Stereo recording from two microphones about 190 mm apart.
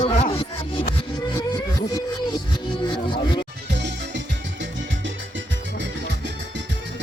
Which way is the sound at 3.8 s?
70° right (ahead or behind).